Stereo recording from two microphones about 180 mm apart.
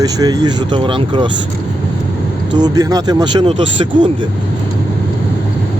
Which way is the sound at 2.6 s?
25° right (ahead or behind).